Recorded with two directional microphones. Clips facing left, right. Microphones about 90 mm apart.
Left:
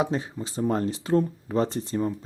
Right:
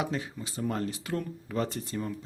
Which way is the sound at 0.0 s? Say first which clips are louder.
Left 6 dB; 30° left (ahead or behind).